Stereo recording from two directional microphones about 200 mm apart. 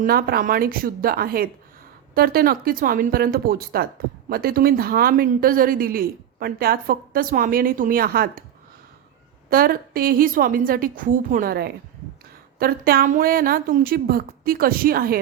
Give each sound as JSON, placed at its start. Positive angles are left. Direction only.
{"t": 0.0, "sound": "speech", "side_deg": -50}
{"t": 9.5, "sound": "speech", "side_deg": -45}